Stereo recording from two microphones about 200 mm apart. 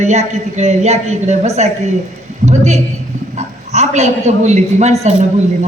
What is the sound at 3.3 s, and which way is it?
A man's voice, 35° right (ahead or behind).